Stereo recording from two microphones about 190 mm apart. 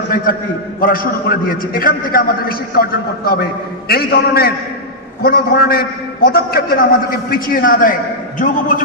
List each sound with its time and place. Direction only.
0.1 s a man's voice: 50° left (ahead or behind)